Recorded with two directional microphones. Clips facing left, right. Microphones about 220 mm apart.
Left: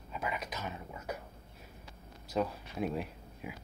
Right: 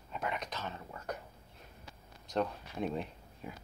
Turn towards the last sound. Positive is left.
turn(degrees=5)  # may be behind; listen again after turning